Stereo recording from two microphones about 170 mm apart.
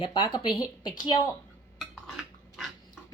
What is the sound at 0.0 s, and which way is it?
Speech, 25° left (ahead or behind).